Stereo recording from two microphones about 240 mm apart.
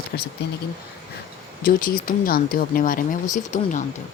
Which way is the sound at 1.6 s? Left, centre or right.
Left.